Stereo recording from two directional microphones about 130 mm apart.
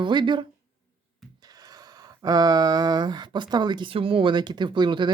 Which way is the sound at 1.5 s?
30° right (ahead or behind).